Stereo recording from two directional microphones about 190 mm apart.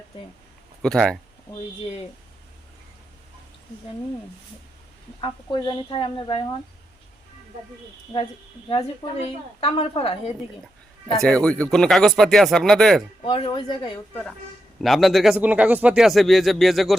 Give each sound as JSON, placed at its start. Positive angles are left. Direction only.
{"t": 0.8, "sound": "speech", "side_deg": 5}
{"t": 5.2, "sound": "speech", "side_deg": 25}
{"t": 9.6, "sound": "speech", "side_deg": 30}
{"t": 11.2, "sound": "speech", "side_deg": 5}
{"t": 13.2, "sound": "speech", "side_deg": 25}
{"t": 14.1, "sound": "speech", "side_deg": 10}